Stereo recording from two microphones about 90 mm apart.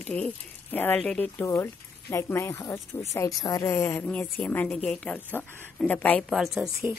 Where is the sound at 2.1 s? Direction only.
30° left (ahead or behind).